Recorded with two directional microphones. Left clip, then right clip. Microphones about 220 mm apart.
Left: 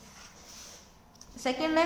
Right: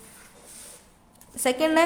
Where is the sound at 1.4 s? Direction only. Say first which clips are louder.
Right 6 dB; 45° right (ahead or behind).